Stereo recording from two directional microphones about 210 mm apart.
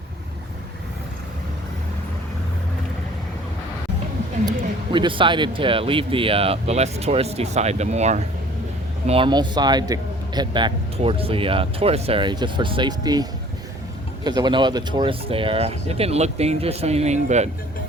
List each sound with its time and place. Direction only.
4.4 s a man's voice: 25° right (ahead or behind)
14.3 s a man's voice: 20° right (ahead or behind)